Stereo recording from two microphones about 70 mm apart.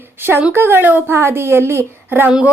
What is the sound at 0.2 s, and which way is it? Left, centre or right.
Speech, right.